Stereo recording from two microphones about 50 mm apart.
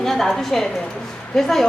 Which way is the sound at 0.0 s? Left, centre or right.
Centre.